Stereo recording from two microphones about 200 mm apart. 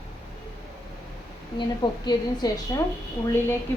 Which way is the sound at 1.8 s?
25° left (ahead or behind).